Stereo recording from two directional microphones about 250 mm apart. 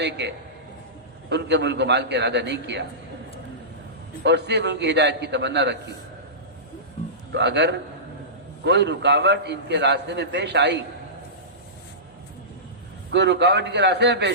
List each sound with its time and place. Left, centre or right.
0.0 s a man's voice: right
4.2 s a man's voice: right
7.3 s a man's voice: right
13.1 s a man's voice: right